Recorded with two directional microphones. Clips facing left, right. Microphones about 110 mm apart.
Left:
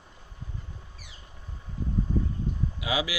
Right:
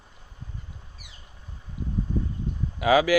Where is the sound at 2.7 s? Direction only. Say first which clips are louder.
Right 13 dB; 50° right (ahead or behind).